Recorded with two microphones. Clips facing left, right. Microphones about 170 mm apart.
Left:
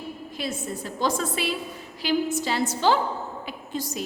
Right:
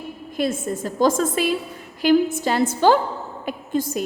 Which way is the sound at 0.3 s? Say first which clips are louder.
Right 9 dB; 50° right (ahead or behind).